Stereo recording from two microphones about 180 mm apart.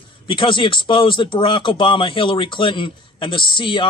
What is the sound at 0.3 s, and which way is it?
Speech, 25° left (ahead or behind).